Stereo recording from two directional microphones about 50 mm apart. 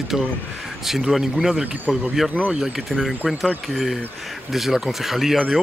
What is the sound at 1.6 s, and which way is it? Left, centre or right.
Speech, right.